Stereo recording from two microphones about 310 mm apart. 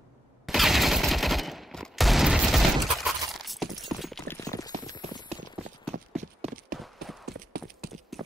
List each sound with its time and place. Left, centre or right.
0.5 s fusillade: centre
3.4 s clip-clop: centre
5.9 s clip-clop: right
6.8 s clip-clop: centre
7.3 s clip-clop: right
8.1 s clip-clop: centre